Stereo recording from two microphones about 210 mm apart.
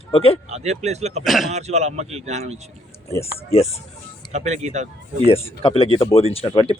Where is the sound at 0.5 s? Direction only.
30° right (ahead or behind).